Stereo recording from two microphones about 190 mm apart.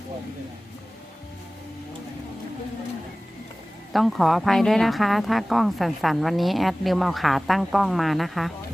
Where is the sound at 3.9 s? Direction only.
Centre (ahead or behind).